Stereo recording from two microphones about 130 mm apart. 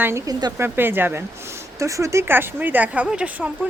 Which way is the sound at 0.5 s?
15° right (ahead or behind).